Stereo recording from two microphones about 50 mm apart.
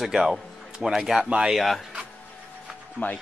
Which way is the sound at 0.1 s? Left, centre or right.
Centre.